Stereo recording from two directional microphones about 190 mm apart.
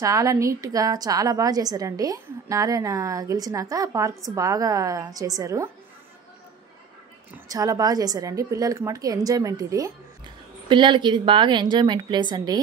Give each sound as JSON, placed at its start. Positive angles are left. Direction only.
{"t": 0.0, "sound": "a woman's voice", "side_deg": -15}
{"t": 7.4, "sound": "a woman's voice", "side_deg": -20}